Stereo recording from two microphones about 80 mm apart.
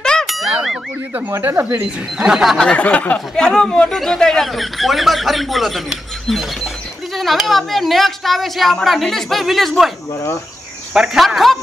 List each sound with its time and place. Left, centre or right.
0.0 s a sound: centre
1.4 s speech: right
2.1 s speech: centre
2.6 s speech: centre